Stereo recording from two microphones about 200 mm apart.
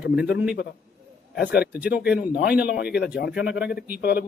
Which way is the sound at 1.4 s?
50° left (ahead or behind).